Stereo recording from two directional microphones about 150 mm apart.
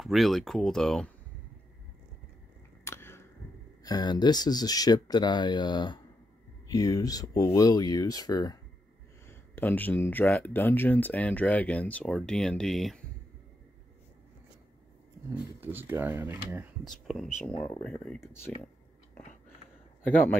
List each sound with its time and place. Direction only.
0.0 s speech: centre (ahead or behind)
2.8 s a sound: 15° left (ahead or behind)
3.8 s speech: 25° left (ahead or behind)
9.3 s speech: 15° left (ahead or behind)
15.2 s speech: 15° right (ahead or behind)
16.8 s speech: centre (ahead or behind)